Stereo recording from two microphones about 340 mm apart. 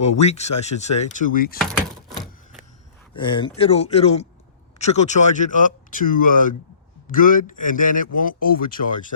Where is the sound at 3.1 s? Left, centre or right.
Centre.